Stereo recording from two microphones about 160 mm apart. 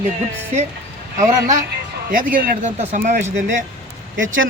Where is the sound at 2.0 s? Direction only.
60° right (ahead or behind).